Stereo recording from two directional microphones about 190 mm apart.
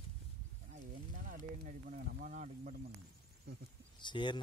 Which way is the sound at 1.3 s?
45° right (ahead or behind).